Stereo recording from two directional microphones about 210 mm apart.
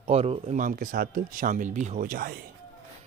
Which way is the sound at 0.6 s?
40° right (ahead or behind).